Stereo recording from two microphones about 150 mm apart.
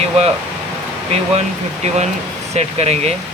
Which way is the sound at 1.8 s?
50° right (ahead or behind).